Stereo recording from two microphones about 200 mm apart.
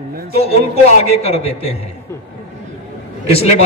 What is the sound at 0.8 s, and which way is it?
Speech, 30° left (ahead or behind).